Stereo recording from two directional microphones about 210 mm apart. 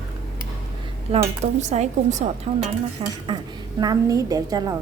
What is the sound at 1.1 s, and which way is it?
Speech, 30° right (ahead or behind).